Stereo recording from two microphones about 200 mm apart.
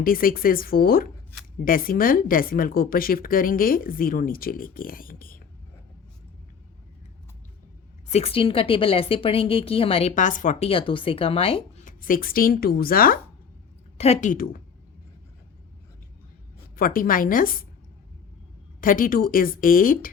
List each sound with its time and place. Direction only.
0.0 s a woman's voice: 45° left (ahead or behind)
8.1 s a woman's voice: 30° left (ahead or behind); by 13.1 s 45° left (ahead or behind)
14.0 s a woman's voice: 35° left (ahead or behind)
16.7 s a woman's voice: 45° left (ahead or behind)
18.8 s a woman's voice: 45° left (ahead or behind)